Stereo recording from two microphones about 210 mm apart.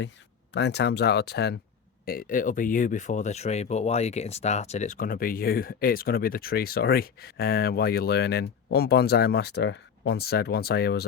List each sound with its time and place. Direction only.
0.5 s speech: 55° left (ahead or behind)